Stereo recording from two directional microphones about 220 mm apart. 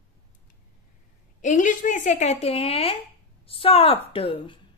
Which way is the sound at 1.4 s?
35° left (ahead or behind).